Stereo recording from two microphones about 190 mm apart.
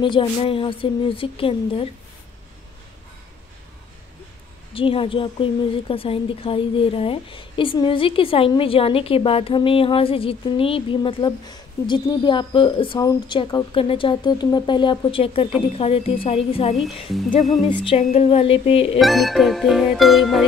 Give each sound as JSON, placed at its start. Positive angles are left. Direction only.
{"t": 0.0, "sound": "a woman's voice", "side_deg": 25}
{"t": 4.7, "sound": "a woman's voice", "side_deg": 30}
{"t": 17.8, "sound": "a woman's voice", "side_deg": 30}
{"t": 18.9, "sound": "music", "side_deg": 0}